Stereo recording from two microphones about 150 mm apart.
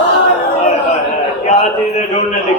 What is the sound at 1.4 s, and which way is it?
Speech, 50° left (ahead or behind).